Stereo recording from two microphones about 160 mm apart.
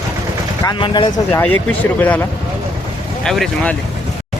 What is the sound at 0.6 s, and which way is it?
Speech, 30° left (ahead or behind).